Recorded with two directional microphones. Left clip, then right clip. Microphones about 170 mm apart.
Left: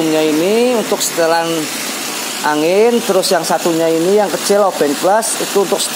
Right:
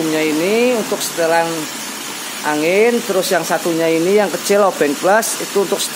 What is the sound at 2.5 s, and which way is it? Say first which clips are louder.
Speech: left 2 dB; 20° left (ahead or behind).